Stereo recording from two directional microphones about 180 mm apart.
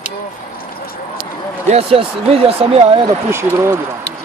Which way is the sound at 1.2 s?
30° right (ahead or behind).